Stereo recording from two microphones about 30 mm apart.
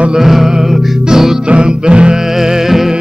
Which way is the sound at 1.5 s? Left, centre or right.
Right.